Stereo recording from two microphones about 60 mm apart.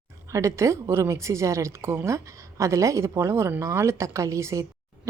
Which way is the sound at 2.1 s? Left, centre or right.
Right.